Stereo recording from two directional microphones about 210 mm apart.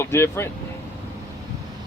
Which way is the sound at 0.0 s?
10° left (ahead or behind).